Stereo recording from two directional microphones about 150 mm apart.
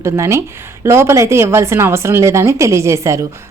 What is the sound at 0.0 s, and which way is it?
A woman's voice, 20° right (ahead or behind).